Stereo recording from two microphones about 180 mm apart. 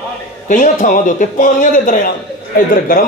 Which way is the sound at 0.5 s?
45° left (ahead or behind).